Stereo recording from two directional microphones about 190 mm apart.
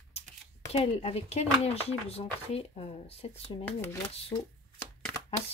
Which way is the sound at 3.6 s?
10° left (ahead or behind).